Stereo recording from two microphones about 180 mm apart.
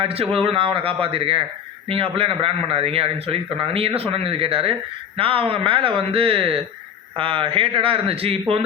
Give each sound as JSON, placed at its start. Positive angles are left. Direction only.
{"t": 0.0, "sound": "a man's voice", "side_deg": -35}